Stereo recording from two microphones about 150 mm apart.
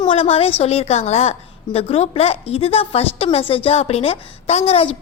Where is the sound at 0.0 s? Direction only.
40° left (ahead or behind).